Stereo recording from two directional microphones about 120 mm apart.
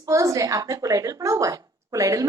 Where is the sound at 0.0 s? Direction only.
25° right (ahead or behind).